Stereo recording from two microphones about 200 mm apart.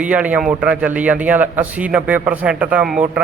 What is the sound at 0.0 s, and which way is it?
A man's voice, 5° right (ahead or behind).